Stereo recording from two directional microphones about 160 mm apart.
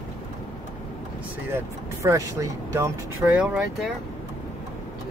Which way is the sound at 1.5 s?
15° right (ahead or behind).